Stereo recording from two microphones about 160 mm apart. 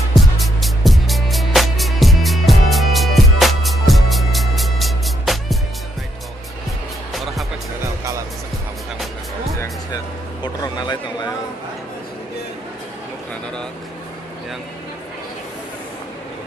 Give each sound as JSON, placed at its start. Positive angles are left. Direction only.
{"t": 0.1, "sound": "music", "side_deg": 0}
{"t": 7.1, "sound": "music", "side_deg": 0}
{"t": 10.4, "sound": "a sound", "side_deg": 25}